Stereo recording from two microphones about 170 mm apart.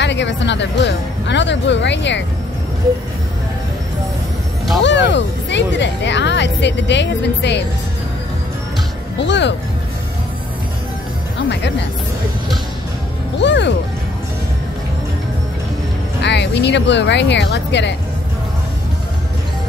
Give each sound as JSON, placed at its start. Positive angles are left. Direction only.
{"t": 0.0, "sound": "speech", "side_deg": 90}
{"t": 4.8, "sound": "speech", "side_deg": 90}
{"t": 9.2, "sound": "speech", "side_deg": 90}
{"t": 11.3, "sound": "speech", "side_deg": 90}
{"t": 13.4, "sound": "speech", "side_deg": 90}
{"t": 16.2, "sound": "speech", "side_deg": 90}